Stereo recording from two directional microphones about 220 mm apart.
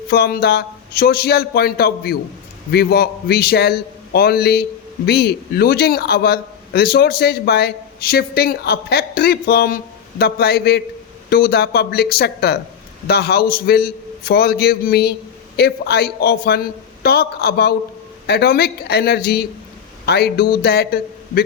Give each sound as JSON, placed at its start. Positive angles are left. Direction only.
{"t": 0.1, "sound": "a man's voice", "side_deg": 45}